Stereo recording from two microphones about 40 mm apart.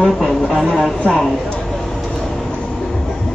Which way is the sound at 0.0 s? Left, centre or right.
Centre.